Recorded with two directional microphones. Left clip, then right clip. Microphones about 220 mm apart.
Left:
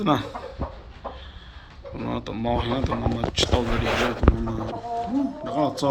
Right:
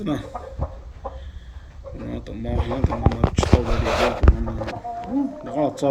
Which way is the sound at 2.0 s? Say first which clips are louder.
Left 6 dB; 5° right (ahead or behind).